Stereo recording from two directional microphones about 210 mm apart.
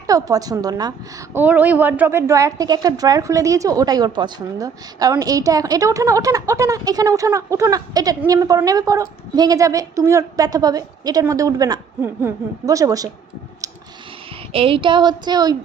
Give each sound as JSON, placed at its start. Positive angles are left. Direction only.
{"t": 0.1, "sound": "a woman's voice", "side_deg": -15}
{"t": 14.5, "sound": "speech", "side_deg": -25}